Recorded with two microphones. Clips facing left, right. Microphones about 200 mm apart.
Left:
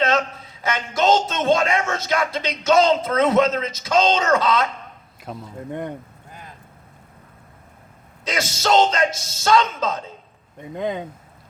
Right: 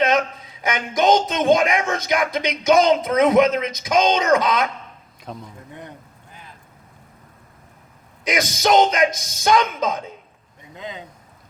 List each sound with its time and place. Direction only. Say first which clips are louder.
0.0 s a man's voice: right 2 dB; 15° right (ahead or behind)
5.2 s speech: left 1 dB; 5° left (ahead or behind)
8.2 s a man's voice: right 3 dB; 15° right (ahead or behind)
10.6 s speech: left 9 dB; 55° left (ahead or behind)